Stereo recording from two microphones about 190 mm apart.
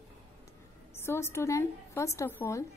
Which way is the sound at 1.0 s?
15° left (ahead or behind).